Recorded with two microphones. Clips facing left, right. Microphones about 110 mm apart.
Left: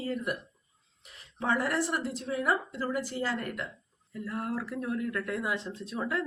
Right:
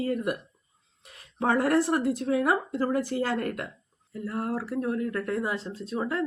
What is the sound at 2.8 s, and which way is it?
Speech, 45° right (ahead or behind).